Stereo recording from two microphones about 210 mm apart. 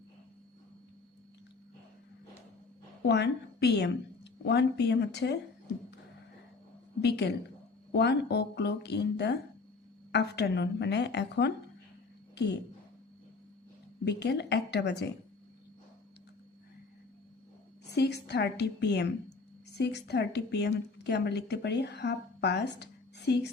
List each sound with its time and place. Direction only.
3.1 s a woman's voice: 55° left (ahead or behind)
7.0 s a woman's voice: 50° left (ahead or behind)
14.0 s a woman's voice: 55° left (ahead or behind)
17.9 s a woman's voice: 55° left (ahead or behind)